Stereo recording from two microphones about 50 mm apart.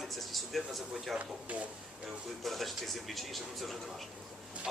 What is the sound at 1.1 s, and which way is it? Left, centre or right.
Speech, right.